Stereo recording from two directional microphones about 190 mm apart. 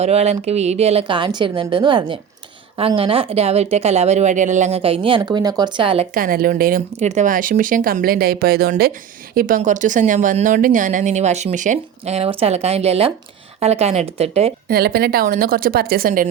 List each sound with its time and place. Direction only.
0.0 s a woman's voice: 35° right (ahead or behind)
6.1 s speech: 50° right (ahead or behind); by 14.5 s 30° right (ahead or behind)
14.7 s speech: 55° right (ahead or behind)